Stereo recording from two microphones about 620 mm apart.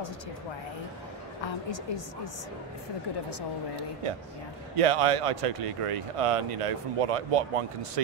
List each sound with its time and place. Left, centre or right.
4.7 s speech: right